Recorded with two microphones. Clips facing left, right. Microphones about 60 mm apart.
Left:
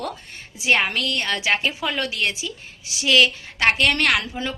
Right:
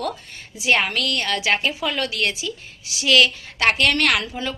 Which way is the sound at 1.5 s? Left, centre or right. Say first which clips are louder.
Right 1 dB; centre.